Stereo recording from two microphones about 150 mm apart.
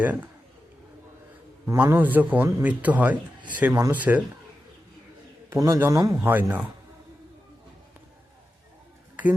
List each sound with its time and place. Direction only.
0.0 s a man's voice: 10° right (ahead or behind)
1.6 s a man's voice: 15° right (ahead or behind)
5.5 s a man's voice: 20° right (ahead or behind)